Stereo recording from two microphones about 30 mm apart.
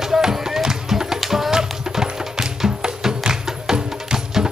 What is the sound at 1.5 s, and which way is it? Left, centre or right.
Music, centre.